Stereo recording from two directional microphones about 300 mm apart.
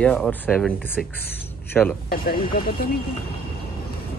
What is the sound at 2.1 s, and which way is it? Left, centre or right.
Speech, left.